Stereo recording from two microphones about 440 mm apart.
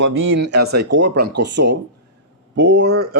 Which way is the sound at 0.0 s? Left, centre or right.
Right.